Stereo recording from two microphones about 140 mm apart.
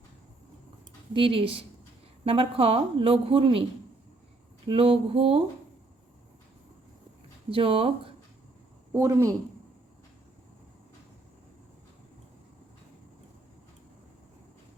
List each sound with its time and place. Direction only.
1.1 s a woman's voice: 40° right (ahead or behind)
4.6 s a woman's voice: 40° right (ahead or behind)
7.5 s speech: 40° right (ahead or behind)
8.9 s speech: 20° right (ahead or behind)